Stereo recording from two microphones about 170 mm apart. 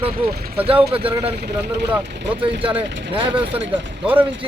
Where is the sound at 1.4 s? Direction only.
80° right.